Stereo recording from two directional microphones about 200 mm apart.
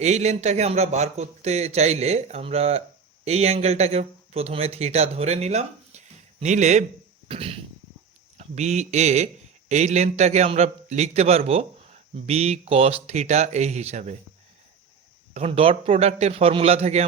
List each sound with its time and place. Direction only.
0.0 s a man's voice: 35° right (ahead or behind)
15.3 s a man's voice: 30° right (ahead or behind)